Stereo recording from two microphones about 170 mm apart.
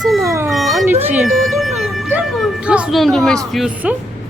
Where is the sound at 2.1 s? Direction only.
Centre (ahead or behind).